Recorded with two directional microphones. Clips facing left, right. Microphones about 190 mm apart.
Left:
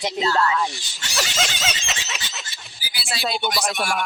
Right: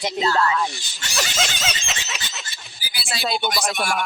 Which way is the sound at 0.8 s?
50° right (ahead or behind).